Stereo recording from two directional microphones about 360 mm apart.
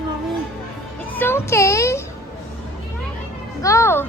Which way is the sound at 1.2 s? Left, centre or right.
Centre.